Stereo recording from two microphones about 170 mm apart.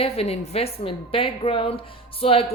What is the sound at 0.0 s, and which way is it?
Speech, 35° left (ahead or behind).